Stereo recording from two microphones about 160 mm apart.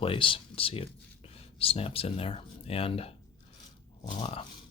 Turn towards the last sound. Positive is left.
turn(degrees=40)  # may be behind; listen again after turning